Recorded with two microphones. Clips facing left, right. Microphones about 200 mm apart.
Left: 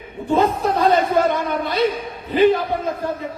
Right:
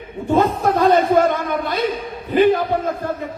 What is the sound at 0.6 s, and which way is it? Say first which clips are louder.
A man's voice: right 2 dB; 50° right (ahead or behind).